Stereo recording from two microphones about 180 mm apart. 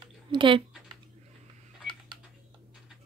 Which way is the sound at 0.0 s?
25° right (ahead or behind).